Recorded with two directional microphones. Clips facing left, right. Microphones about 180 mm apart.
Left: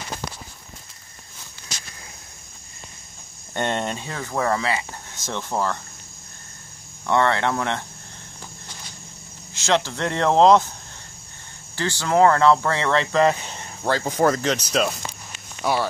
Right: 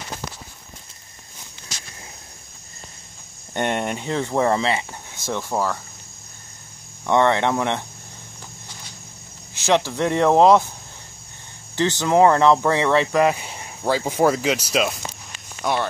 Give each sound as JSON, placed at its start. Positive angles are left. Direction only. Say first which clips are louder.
{"t": 3.5, "sound": "speech", "louder": "right 2 dB", "side_deg": -15}
{"t": 5.1, "sound": "speech", "louder": "right 2 dB", "side_deg": -10}
{"t": 7.1, "sound": "speech", "louder": "right 2 dB", "side_deg": -15}
{"t": 9.5, "sound": "speech", "louder": "right 2 dB", "side_deg": -15}
{"t": 11.7, "sound": "speech", "louder": "right 3 dB", "side_deg": -20}